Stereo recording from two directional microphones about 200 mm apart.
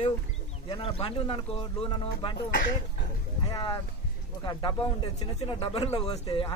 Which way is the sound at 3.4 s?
20° left (ahead or behind).